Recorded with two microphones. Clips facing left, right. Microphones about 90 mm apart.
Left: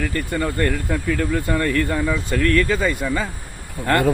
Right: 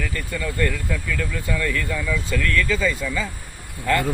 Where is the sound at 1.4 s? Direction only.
50° left (ahead or behind).